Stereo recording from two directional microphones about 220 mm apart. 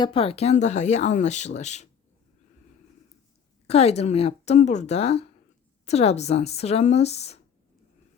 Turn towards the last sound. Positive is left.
turn(degrees=30)  # may be behind; listen again after turning